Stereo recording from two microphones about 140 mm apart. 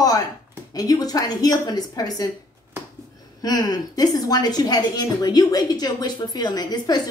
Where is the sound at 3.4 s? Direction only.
30° left (ahead or behind).